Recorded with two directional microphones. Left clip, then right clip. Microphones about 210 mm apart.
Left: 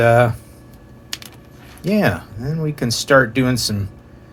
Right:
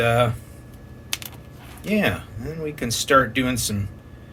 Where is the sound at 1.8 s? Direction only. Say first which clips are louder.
Left 4 dB; 25° left (ahead or behind).